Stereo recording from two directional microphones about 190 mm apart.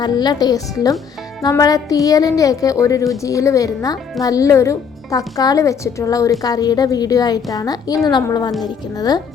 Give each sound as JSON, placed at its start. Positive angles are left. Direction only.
{"t": 0.0, "sound": "a woman's voice", "side_deg": 20}